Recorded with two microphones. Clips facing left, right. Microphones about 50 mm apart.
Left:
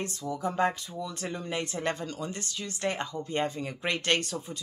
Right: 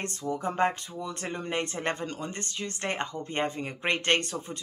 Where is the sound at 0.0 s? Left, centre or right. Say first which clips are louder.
Right 1 dB; right.